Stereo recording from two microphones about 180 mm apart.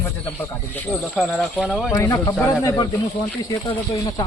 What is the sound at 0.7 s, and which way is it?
Speech, 5° left (ahead or behind).